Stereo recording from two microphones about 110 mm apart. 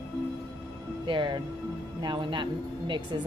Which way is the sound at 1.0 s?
45° right (ahead or behind).